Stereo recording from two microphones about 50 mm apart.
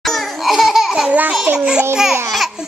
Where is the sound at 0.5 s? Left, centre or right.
Centre.